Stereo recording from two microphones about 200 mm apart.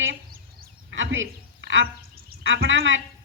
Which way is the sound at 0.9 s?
70° right (ahead or behind).